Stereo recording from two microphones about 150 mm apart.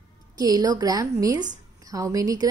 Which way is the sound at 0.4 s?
25° right (ahead or behind).